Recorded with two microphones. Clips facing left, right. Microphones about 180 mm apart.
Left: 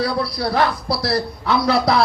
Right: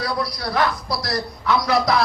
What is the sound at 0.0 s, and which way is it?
A man's voice, 30° left (ahead or behind).